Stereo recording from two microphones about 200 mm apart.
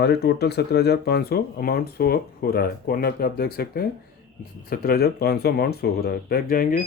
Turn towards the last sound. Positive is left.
turn(degrees=45)  # may be behind; listen again after turning